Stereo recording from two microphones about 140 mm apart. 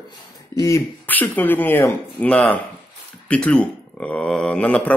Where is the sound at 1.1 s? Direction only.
10° left (ahead or behind).